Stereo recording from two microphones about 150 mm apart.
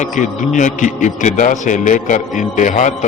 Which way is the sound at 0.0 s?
55° left (ahead or behind).